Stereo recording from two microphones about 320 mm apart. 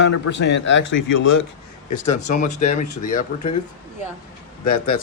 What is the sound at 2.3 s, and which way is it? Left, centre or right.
Speech, left.